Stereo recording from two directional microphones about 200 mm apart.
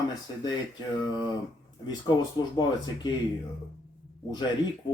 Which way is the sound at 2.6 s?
20° left (ahead or behind).